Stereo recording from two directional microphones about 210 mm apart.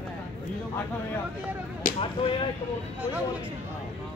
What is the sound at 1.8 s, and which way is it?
Speech, 40° left (ahead or behind).